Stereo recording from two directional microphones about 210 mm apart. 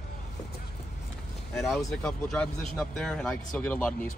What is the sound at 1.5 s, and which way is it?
Speech, centre (ahead or behind).